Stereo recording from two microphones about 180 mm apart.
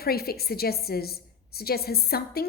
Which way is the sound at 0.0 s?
60° left (ahead or behind).